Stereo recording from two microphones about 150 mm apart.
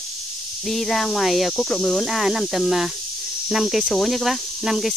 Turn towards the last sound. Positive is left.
turn(degrees=0)  # may be behind; listen again after turning